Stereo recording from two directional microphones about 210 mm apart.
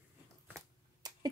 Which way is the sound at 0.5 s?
20° right (ahead or behind).